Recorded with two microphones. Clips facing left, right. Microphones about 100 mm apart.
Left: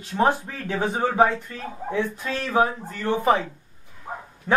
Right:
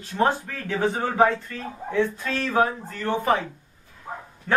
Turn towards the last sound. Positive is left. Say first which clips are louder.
# left 1 dB
turn(degrees=20)  # may be behind; listen again after turning